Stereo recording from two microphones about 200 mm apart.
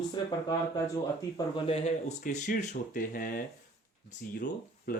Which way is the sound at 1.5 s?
30° left (ahead or behind).